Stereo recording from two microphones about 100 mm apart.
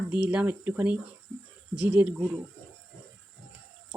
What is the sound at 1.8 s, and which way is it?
Speech, 20° right (ahead or behind).